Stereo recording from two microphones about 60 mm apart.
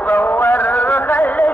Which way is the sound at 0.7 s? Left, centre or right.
Left.